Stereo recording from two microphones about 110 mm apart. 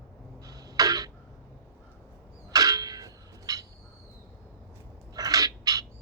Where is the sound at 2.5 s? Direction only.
35° right (ahead or behind).